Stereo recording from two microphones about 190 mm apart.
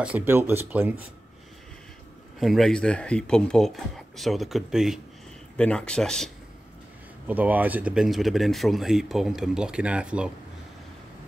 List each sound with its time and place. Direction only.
0.0 s speech: 10° right (ahead or behind)
2.4 s speech: centre (ahead or behind)
7.2 s speech: 10° right (ahead or behind)